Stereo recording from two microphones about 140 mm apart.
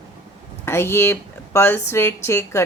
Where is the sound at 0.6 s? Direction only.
15° left (ahead or behind).